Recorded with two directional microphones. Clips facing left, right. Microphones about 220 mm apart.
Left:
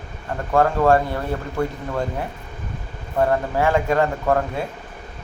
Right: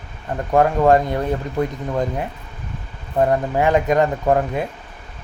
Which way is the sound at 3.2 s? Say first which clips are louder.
Right 2 dB; 20° right (ahead or behind).